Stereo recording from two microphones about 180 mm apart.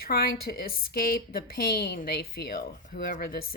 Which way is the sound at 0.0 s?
60° left (ahead or behind).